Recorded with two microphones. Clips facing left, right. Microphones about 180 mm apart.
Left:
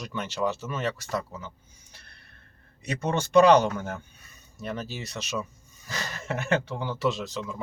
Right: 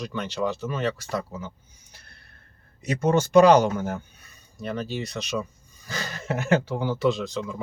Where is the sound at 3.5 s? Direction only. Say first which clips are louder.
Right 2 dB; 35° right (ahead or behind).